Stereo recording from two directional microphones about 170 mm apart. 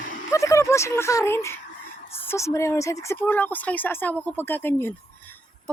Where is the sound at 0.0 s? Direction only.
50° left (ahead or behind).